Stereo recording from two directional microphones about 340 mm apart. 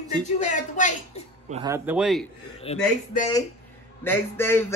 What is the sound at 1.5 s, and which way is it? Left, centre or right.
Speech, centre.